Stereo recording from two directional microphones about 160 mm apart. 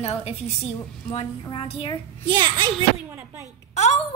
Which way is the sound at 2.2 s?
30° right (ahead or behind).